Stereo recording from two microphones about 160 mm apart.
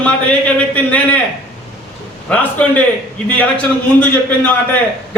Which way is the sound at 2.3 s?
10° left (ahead or behind).